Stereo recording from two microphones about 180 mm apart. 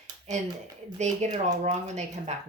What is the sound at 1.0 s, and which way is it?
Speech, 40° right (ahead or behind).